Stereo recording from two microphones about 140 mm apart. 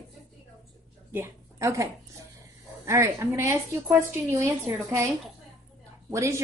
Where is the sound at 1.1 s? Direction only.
20° right (ahead or behind).